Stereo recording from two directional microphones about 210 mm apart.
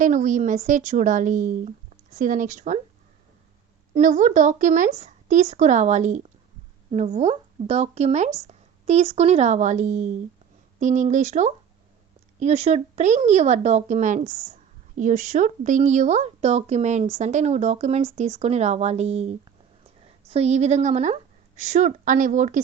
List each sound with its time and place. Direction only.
0.0 s speech: 35° right (ahead or behind)
3.9 s a woman's voice: 35° right (ahead or behind)